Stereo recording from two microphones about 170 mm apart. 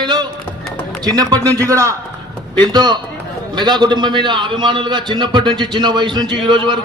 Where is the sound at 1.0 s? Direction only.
20° right (ahead or behind).